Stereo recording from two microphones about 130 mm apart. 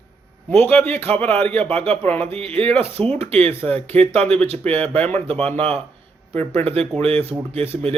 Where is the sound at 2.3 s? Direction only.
45° right (ahead or behind).